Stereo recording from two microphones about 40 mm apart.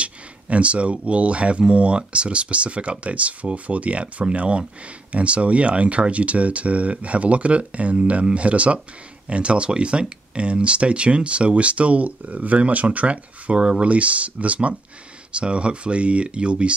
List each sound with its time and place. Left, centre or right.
0.0 s speech: right